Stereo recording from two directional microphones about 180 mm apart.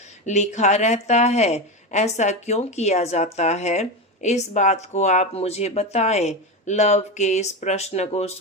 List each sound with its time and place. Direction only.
0.3 s speech: 40° left (ahead or behind)